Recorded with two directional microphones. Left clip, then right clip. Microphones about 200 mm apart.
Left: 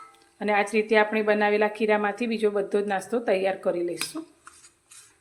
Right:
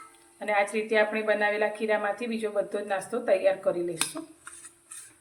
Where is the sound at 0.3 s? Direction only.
50° left (ahead or behind).